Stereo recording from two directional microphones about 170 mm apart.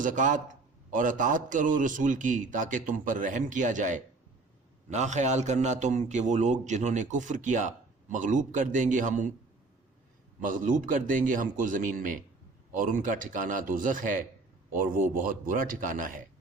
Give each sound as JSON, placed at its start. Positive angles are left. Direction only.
{"t": 0.0, "sound": "a man's voice", "side_deg": -50}
{"t": 10.4, "sound": "a man's voice", "side_deg": -50}